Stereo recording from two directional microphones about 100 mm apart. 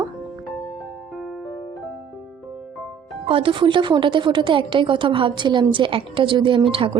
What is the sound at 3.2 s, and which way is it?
A woman's voice, 65° right (ahead or behind).